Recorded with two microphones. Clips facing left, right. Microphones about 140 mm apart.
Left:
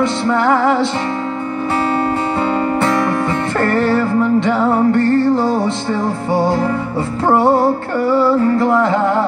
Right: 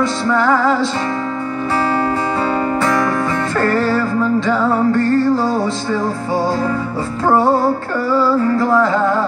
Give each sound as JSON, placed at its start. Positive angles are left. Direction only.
{"t": 0.0, "sound": "music", "side_deg": 20}
{"t": 2.8, "sound": "music", "side_deg": 25}
{"t": 7.2, "sound": "music", "side_deg": 20}